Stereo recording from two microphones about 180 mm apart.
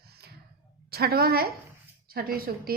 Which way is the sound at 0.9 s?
60° right (ahead or behind).